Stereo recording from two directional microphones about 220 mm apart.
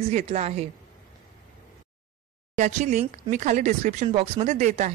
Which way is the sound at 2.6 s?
35° right (ahead or behind).